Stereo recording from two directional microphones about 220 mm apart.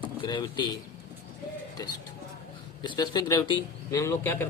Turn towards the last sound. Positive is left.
turn(degrees=10)  # may be behind; listen again after turning